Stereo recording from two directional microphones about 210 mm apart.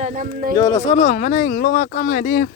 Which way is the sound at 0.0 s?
40° right (ahead or behind).